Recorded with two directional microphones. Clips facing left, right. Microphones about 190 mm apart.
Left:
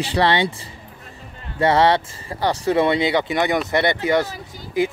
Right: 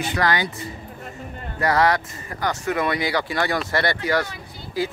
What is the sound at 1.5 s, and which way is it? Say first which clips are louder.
Speech: left 4 dB; 30° left (ahead or behind).